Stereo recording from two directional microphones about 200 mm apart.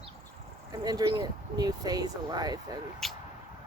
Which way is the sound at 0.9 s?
20° right (ahead or behind).